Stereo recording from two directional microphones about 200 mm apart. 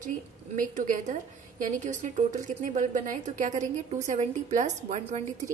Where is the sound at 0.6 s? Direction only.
40° right (ahead or behind).